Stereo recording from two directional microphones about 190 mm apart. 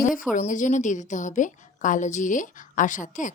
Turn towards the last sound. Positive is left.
turn(degrees=40)  # may be behind; listen again after turning